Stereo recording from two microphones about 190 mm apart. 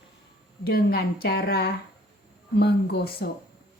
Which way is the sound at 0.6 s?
55° left (ahead or behind).